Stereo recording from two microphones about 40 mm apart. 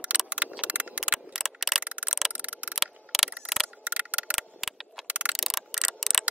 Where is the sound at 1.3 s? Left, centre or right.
Centre.